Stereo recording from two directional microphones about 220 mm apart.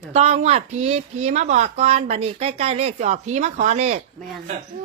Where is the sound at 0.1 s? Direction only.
30° right (ahead or behind).